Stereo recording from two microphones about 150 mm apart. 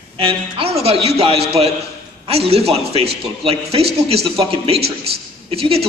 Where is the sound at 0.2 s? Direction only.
35° right (ahead or behind).